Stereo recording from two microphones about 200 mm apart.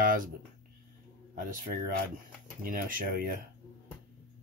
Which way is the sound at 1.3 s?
40° right (ahead or behind).